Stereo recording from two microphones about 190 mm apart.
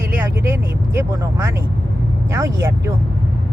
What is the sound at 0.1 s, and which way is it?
Speech, 10° right (ahead or behind).